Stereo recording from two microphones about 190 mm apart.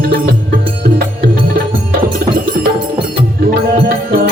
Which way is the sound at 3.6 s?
55° right (ahead or behind).